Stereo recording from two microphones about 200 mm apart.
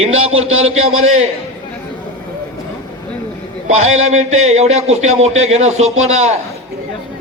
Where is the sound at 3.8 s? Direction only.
90° right.